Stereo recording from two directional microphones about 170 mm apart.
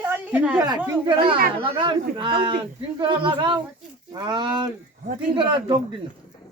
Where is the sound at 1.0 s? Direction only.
30° right (ahead or behind).